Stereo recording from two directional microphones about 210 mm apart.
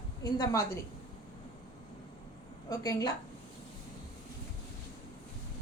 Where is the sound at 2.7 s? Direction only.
15° left (ahead or behind).